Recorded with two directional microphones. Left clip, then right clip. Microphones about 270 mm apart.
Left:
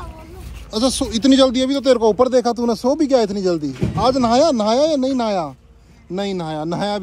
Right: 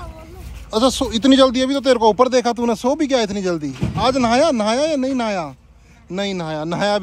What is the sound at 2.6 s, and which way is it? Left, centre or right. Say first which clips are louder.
Speech: even; centre.